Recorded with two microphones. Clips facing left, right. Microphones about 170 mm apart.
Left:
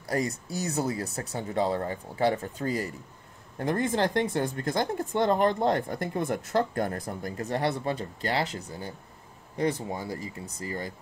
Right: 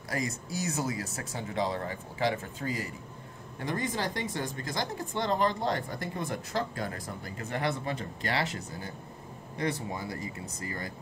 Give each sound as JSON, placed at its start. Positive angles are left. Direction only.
{"t": 0.1, "sound": "speech", "side_deg": 35}
{"t": 3.5, "sound": "speech", "side_deg": 50}